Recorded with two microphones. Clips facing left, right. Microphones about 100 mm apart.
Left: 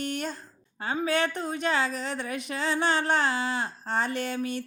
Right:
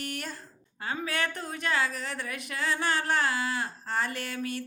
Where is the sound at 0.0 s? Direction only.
25° left (ahead or behind).